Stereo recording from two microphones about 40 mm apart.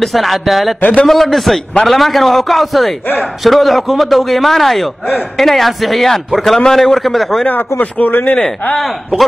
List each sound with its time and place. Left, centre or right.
0.0 s a man's voice: centre
7.8 s speech: left